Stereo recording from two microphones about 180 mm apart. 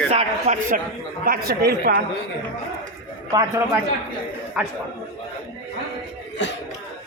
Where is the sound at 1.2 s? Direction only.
55° right (ahead or behind).